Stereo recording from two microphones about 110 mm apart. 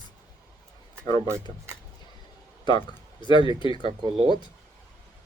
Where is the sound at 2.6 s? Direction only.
45° left (ahead or behind).